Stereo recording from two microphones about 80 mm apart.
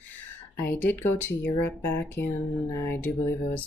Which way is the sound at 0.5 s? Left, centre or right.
Left.